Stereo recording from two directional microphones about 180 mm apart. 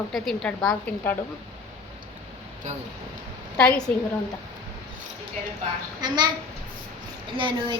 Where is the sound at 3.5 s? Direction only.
10° left (ahead or behind).